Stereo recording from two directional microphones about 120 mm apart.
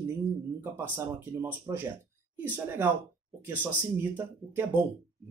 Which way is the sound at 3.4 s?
15° right (ahead or behind).